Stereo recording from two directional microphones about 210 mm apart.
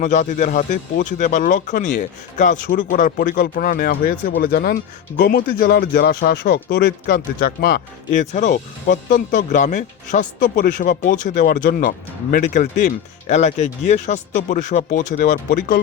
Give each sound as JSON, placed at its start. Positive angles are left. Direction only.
{"t": 0.0, "sound": "speech", "side_deg": 35}